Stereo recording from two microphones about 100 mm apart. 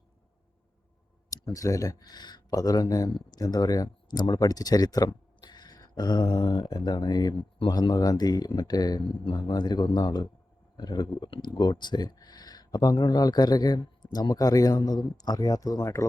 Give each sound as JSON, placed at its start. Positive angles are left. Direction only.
{"t": 1.5, "sound": "speech", "side_deg": 35}
{"t": 9.0, "sound": "speech", "side_deg": 60}
{"t": 9.3, "sound": "speech", "side_deg": 40}